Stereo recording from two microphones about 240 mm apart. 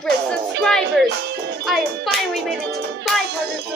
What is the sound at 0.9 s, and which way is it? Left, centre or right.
Speech, right.